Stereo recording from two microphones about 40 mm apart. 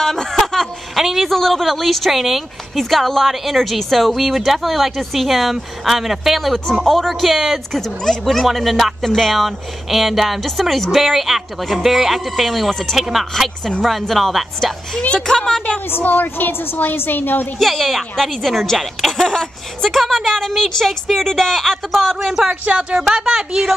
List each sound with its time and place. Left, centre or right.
0.0 s a sound: centre
0.9 s a woman's voice: centre
7.7 s a woman's voice: centre
15.2 s a woman's voice: centre
16.0 s a woman's voice: left
17.6 s a woman's voice: centre
19.1 s a woman's voice: centre
20.0 s a woman's voice: centre
22.5 s speech: right
23.1 s a woman's voice: centre